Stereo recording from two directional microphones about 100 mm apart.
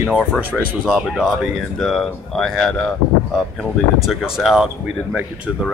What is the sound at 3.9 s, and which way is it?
Speech, 5° right (ahead or behind).